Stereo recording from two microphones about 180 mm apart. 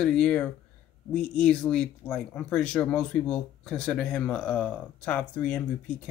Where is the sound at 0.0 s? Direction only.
5° left (ahead or behind).